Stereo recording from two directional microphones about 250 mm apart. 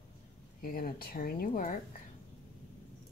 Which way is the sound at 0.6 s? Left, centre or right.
Left.